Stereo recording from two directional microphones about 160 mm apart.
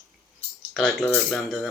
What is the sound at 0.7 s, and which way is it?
Speech, centre (ahead or behind).